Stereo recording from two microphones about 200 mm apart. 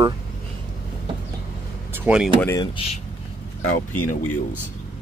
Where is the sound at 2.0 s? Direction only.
5° right (ahead or behind).